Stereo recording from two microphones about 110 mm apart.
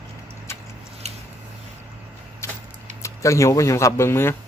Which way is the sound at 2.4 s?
25° left (ahead or behind).